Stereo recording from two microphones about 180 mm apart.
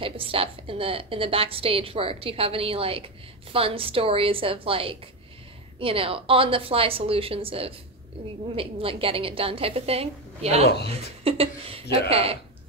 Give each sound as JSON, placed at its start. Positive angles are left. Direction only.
{"t": 0.0, "sound": "a woman's voice", "side_deg": -30}